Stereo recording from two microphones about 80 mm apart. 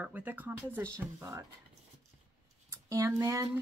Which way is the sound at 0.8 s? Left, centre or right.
Right.